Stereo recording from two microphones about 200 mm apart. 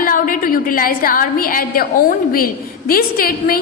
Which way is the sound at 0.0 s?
45° left (ahead or behind).